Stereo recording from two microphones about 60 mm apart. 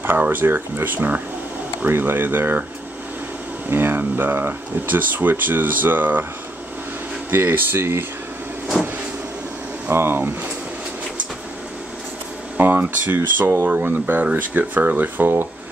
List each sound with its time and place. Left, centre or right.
0.0 s speech: right
3.7 s speech: right
7.2 s speech: right
9.8 s speech: right
12.5 s speech: right